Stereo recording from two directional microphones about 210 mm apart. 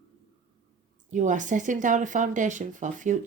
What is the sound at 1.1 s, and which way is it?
Speech, 35° right (ahead or behind).